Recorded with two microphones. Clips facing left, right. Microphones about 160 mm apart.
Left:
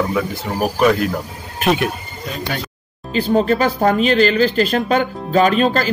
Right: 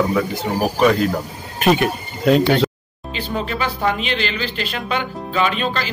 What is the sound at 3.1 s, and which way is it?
Speech, 40° left (ahead or behind).